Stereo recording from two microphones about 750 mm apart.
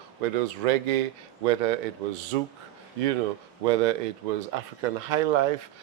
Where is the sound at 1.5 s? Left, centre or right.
Right.